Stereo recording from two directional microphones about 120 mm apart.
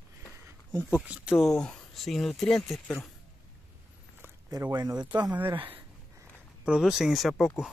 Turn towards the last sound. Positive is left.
turn(degrees=-5)  # may be behind; listen again after turning